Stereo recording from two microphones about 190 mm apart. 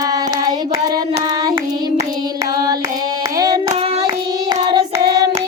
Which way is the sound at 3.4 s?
20° right (ahead or behind).